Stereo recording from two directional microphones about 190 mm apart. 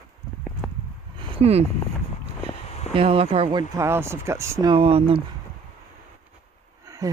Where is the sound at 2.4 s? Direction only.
30° left (ahead or behind).